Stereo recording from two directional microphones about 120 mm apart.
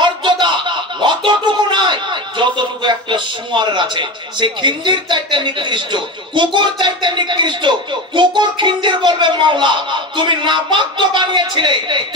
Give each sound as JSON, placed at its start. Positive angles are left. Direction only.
{"t": 0.0, "sound": "speech", "side_deg": -40}